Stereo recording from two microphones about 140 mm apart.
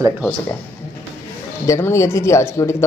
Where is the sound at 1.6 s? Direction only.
20° left (ahead or behind).